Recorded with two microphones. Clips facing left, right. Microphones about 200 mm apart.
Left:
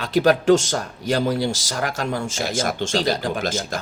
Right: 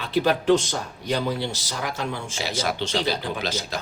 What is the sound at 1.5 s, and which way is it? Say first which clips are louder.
Speech: left 5 dB; 90° left.